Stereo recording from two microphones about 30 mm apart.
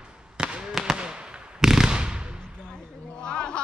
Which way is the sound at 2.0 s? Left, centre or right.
Right.